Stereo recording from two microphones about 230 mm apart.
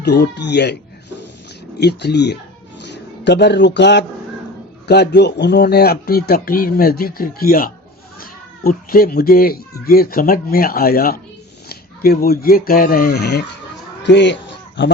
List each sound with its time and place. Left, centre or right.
0.0 s speech: left
1.8 s speech: left